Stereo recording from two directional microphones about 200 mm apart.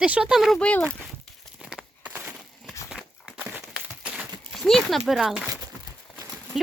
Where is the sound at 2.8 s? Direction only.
Centre (ahead or behind).